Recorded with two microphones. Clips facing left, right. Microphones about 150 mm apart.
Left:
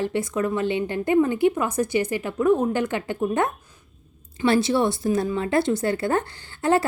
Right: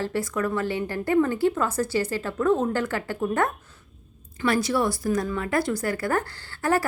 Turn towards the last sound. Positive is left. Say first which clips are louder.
# left 3 dB
turn(degrees=25)  # may be behind; listen again after turning